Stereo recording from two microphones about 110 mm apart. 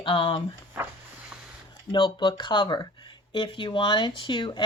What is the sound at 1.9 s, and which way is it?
Speech, 45° left (ahead or behind).